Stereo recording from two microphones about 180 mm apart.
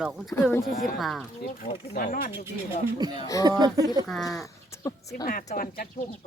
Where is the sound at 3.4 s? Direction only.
20° right (ahead or behind).